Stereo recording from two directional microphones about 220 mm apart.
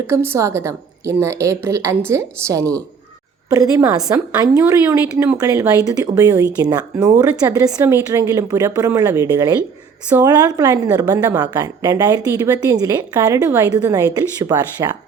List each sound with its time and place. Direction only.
0.1 s a woman's voice: 10° right (ahead or behind)